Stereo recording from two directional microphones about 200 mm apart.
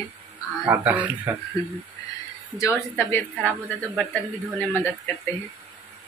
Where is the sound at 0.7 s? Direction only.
10° right (ahead or behind).